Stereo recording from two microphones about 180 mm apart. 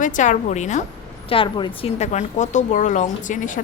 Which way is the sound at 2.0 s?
40° left (ahead or behind).